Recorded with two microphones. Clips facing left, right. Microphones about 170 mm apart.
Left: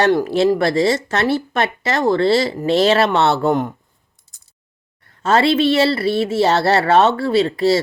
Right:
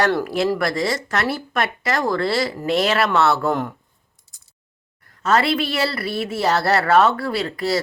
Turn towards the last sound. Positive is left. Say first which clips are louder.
# left 7 dB
turn(degrees=25)  # may be behind; listen again after turning